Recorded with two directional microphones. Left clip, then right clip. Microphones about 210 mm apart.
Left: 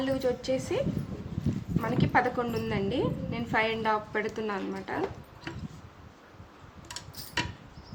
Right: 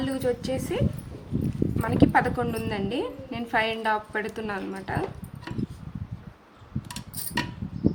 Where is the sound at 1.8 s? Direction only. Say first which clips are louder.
Right 4 dB; 20° right (ahead or behind).